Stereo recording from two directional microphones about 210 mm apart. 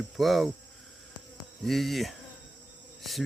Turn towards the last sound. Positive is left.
turn(degrees=0)  # may be behind; listen again after turning